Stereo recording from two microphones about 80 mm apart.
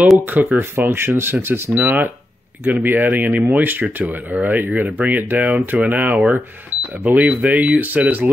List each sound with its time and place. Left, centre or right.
0.2 s speech: right
1.7 s speech: centre